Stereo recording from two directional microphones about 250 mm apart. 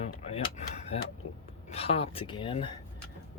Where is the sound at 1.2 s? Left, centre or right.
Left.